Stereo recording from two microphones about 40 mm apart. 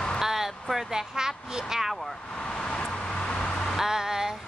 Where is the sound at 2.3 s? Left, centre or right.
Left.